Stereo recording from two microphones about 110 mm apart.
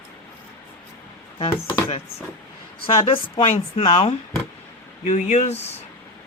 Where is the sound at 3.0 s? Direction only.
55° left (ahead or behind).